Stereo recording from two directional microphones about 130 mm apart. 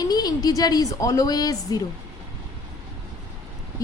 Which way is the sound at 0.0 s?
30° left (ahead or behind).